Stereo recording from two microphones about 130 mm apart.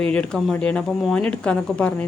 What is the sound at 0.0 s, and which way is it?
Speech, 5° left (ahead or behind).